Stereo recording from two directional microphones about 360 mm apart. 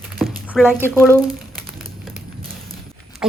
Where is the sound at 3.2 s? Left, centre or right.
Centre.